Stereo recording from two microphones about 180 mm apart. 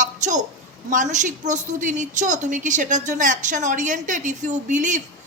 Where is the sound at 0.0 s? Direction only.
45° right (ahead or behind).